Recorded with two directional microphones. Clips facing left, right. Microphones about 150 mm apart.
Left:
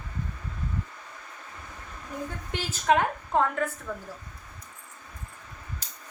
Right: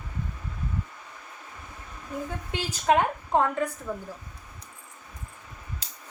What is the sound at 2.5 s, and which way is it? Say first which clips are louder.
A woman's voice: even; 20° right (ahead or behind).